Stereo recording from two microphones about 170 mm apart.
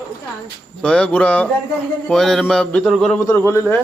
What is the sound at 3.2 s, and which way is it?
Speech, 15° left (ahead or behind).